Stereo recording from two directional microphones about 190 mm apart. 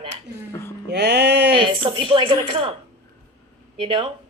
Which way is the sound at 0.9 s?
60° right (ahead or behind).